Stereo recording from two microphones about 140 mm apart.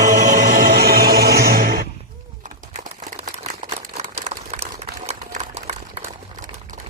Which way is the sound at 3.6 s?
50° right (ahead or behind).